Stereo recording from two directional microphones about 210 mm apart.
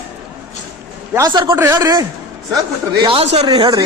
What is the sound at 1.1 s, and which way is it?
Speech, 20° right (ahead or behind).